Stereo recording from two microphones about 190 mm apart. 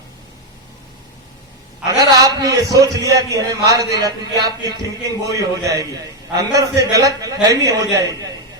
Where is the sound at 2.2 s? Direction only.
20° right (ahead or behind).